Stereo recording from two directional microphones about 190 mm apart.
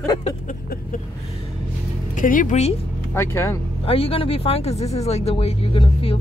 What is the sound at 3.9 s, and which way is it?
Speech, 30° left (ahead or behind).